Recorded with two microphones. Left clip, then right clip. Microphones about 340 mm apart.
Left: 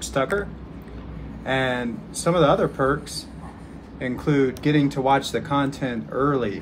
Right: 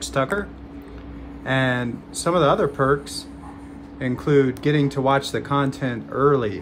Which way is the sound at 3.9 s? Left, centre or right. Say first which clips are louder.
Right 3 dB; right.